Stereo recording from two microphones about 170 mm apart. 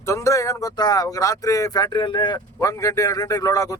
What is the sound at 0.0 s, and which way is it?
Speech, 15° left (ahead or behind).